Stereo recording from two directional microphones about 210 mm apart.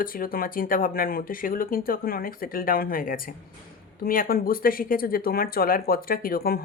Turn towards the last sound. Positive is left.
turn(degrees=45)  # may be behind; listen again after turning